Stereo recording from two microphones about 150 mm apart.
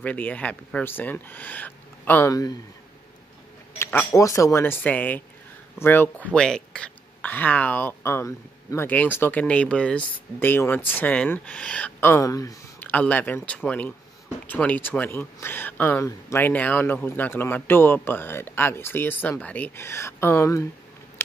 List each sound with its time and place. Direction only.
0.0 s speech: 10° left (ahead or behind)
3.7 s speech: 15° left (ahead or behind)
12.7 s speech: 10° left (ahead or behind)